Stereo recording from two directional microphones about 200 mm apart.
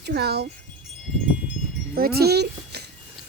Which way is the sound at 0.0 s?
55° right (ahead or behind).